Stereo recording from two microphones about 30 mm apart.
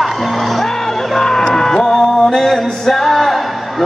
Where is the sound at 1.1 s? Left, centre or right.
Centre.